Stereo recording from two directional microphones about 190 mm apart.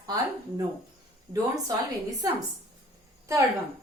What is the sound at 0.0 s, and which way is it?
A woman's voice, 20° right (ahead or behind).